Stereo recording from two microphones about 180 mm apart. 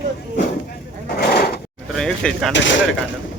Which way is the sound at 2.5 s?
90° left.